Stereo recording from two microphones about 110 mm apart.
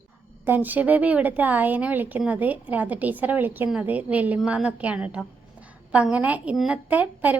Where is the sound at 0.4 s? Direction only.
15° right (ahead or behind).